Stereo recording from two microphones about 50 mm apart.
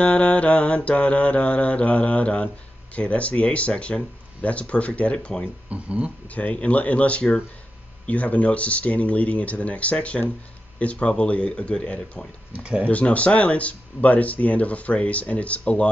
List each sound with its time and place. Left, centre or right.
0.0 s mantra: left
5.7 s speech: right
6.3 s mantra: left
12.5 s speech: right
12.8 s mantra: left